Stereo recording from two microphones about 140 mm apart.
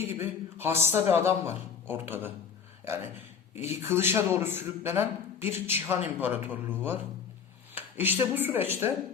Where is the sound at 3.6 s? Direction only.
20° right (ahead or behind).